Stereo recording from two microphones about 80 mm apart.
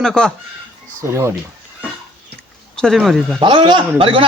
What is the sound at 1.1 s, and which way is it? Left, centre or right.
Speech, right.